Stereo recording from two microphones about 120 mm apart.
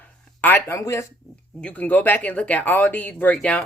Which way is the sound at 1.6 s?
10° left (ahead or behind).